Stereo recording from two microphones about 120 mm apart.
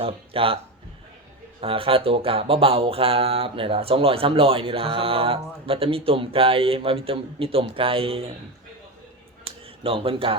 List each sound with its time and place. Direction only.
0.0 s speech: 50° right (ahead or behind)
1.6 s speech: 50° right (ahead or behind)
9.8 s speech: 50° right (ahead or behind)